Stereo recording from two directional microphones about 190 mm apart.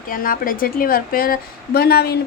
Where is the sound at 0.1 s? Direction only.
50° left (ahead or behind).